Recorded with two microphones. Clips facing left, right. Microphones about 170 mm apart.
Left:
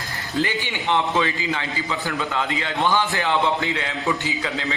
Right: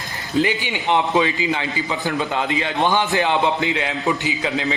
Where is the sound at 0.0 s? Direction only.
20° right (ahead or behind).